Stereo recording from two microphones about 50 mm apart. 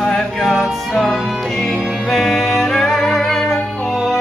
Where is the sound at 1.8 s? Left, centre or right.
Centre.